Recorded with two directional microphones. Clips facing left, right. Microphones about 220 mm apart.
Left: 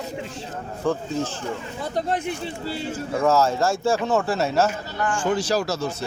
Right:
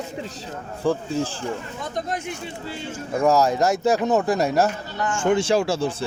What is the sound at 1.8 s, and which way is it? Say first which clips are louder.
Speech: left 6 dB; 35° left (ahead or behind).